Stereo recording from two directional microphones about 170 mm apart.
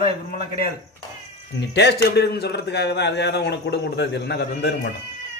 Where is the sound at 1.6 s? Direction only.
85° left.